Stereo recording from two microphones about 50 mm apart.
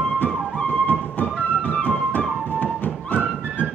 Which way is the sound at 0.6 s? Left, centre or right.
Left.